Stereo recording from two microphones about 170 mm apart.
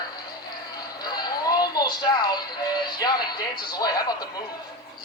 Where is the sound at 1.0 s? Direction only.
25° left (ahead or behind).